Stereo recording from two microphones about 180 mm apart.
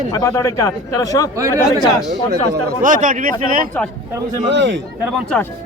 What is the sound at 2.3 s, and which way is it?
Speech, 55° right (ahead or behind).